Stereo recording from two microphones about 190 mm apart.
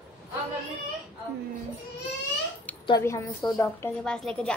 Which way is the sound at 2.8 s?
20° left (ahead or behind).